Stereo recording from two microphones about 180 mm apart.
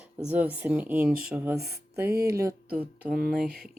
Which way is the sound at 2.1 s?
60° right (ahead or behind).